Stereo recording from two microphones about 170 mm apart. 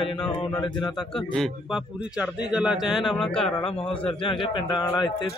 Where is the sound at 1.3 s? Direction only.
5° right (ahead or behind).